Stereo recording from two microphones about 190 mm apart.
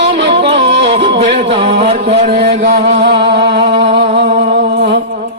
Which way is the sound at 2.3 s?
55° right (ahead or behind).